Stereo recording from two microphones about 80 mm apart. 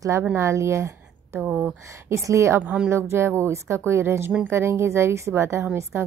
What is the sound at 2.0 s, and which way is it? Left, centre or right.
Speech, right.